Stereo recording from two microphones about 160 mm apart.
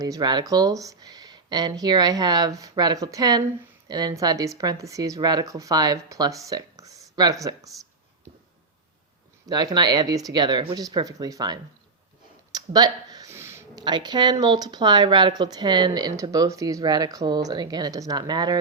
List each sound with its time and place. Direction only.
0.0 s speech: 25° right (ahead or behind)
9.5 s speech: 25° right (ahead or behind)